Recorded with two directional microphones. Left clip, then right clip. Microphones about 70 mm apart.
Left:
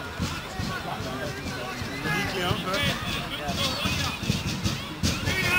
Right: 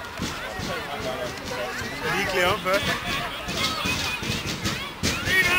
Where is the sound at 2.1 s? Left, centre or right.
Right.